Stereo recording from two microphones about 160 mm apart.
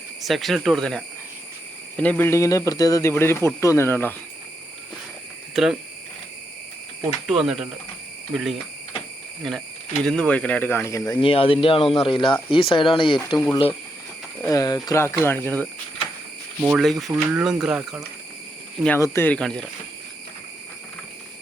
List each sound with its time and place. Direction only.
0.2 s speech: centre (ahead or behind)
5.5 s speech: 5° right (ahead or behind)
7.3 s speech: 5° right (ahead or behind); by 11.2 s 20° left (ahead or behind)
11.2 s speech: 35° left (ahead or behind)
13.1 s speech: centre (ahead or behind)
14.4 s speech: 20° left (ahead or behind)
16.6 s speech: centre (ahead or behind)
18.9 s speech: 15° left (ahead or behind)